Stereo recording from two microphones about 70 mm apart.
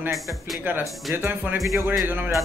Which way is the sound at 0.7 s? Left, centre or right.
Right.